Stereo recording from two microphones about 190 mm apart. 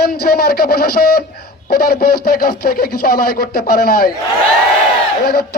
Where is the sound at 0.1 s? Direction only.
55° left (ahead or behind).